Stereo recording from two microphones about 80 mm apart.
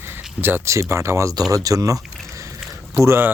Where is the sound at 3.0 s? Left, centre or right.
Right.